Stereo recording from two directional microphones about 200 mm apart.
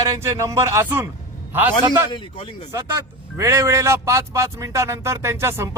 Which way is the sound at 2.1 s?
25° left (ahead or behind).